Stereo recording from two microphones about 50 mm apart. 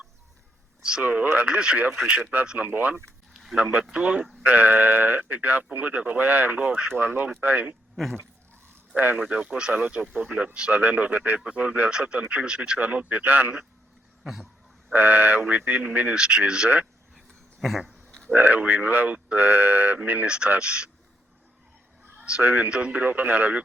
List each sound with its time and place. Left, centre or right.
0.8 s a sound: centre
1.0 s speech: right
2.9 s a sound: centre
3.5 s speech: right
9.1 s speech: right
11.9 s speech: centre
12.8 s speech: right
14.9 s speech: right
16.1 s speech: centre
17.2 s dog: centre
18.3 s speech: right
20.2 s speech: centre
22.2 s a sound: right
22.4 s speech: right